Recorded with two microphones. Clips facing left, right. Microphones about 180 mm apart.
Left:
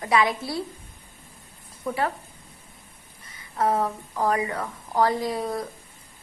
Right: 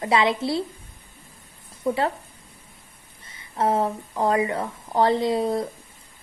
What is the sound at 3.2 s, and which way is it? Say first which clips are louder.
A woman's voice: right 1 dB; 25° right (ahead or behind).